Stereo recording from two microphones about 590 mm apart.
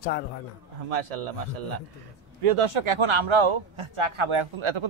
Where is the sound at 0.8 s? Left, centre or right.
Right.